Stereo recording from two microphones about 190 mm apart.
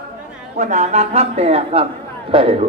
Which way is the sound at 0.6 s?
35° right (ahead or behind).